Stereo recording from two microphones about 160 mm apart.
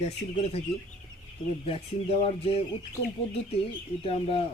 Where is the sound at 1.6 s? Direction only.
35° left (ahead or behind).